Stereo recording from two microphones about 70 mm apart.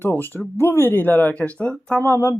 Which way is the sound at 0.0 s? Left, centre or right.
Left.